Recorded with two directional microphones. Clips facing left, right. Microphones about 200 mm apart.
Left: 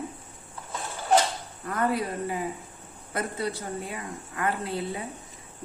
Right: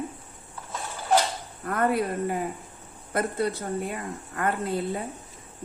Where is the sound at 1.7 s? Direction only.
55° right (ahead or behind).